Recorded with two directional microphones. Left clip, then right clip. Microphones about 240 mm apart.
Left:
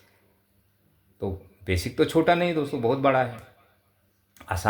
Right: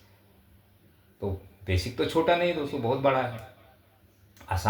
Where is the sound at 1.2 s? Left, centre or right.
Left.